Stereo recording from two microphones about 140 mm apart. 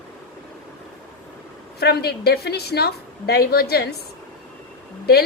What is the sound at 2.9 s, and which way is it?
Speech, 90° left.